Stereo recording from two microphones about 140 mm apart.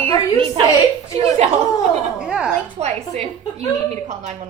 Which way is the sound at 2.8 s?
55° right (ahead or behind).